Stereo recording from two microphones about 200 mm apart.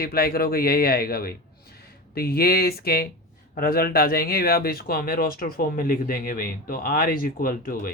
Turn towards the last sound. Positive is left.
turn(degrees=45)  # may be behind; listen again after turning